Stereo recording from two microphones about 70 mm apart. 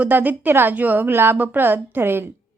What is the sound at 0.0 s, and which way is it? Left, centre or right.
A woman's voice, right.